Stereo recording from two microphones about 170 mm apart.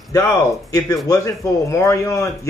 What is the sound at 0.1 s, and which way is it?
Speech, 15° left (ahead or behind).